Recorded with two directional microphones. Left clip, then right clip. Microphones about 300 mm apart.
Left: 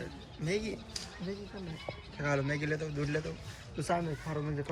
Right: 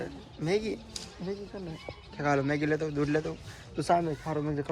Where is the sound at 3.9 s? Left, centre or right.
Right.